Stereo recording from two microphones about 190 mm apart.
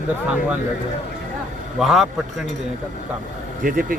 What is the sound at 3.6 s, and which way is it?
Speech, 45° right (ahead or behind).